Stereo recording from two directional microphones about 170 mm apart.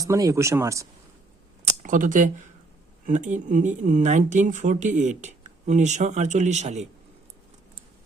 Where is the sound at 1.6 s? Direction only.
50° right (ahead or behind).